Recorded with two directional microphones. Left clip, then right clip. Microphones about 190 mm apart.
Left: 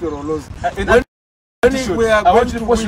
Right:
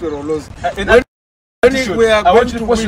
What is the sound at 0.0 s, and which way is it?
Speech, centre (ahead or behind).